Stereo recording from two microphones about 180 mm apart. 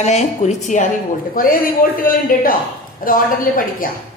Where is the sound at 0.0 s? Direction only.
40° left (ahead or behind).